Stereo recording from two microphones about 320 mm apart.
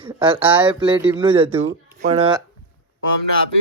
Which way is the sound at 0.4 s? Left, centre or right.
Centre.